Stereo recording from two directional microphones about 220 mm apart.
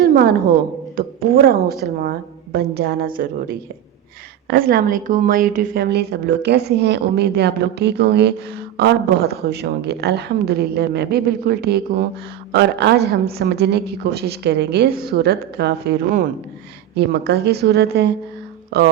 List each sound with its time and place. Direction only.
0.0 s a sound: 45° right (ahead or behind)
0.9 s a woman's voice: 45° right (ahead or behind)
4.4 s a woman's voice: 40° right (ahead or behind)